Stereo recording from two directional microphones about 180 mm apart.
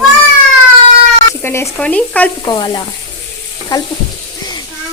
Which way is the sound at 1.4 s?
15° left (ahead or behind).